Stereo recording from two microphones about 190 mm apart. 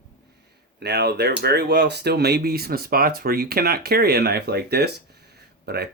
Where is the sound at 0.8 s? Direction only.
60° right (ahead or behind).